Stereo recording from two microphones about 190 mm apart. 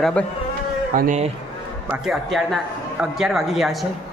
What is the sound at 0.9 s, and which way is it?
Speech, 40° right (ahead or behind).